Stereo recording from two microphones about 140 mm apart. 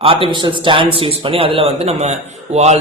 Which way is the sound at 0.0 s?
40° right (ahead or behind).